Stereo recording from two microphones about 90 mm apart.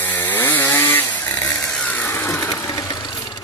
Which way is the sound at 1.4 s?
35° left (ahead or behind).